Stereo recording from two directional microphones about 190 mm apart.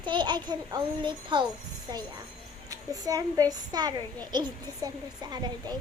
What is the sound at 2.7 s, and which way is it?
A child's voice, 20° right (ahead or behind).